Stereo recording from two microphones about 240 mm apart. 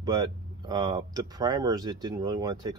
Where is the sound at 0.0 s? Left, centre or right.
Centre.